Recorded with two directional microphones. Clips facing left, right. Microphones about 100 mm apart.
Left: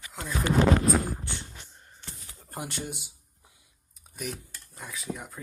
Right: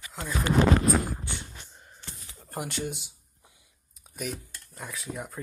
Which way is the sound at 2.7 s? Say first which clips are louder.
Right 3 dB; 55° right (ahead or behind).